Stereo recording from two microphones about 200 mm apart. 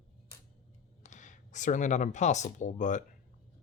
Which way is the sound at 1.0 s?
35° left (ahead or behind).